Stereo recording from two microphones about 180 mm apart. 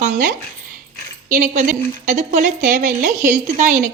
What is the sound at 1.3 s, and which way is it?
A woman's voice, 50° right (ahead or behind).